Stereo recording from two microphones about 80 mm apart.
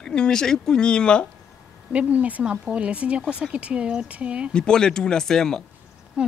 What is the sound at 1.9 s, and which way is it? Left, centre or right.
Speech, centre.